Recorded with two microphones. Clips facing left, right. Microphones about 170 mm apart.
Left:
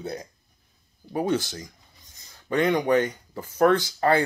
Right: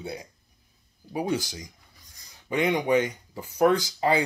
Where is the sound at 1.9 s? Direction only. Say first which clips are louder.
Left 1 dB; 25° left (ahead or behind).